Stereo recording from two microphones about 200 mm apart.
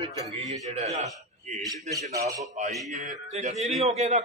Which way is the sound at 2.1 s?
15° right (ahead or behind).